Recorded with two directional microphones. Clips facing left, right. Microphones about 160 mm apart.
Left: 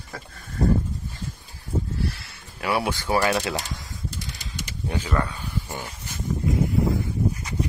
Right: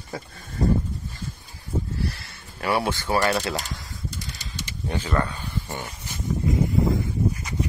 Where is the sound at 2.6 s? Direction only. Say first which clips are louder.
Right 1 dB; 5° left (ahead or behind).